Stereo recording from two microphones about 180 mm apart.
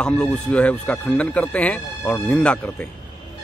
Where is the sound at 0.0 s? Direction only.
5° left (ahead or behind).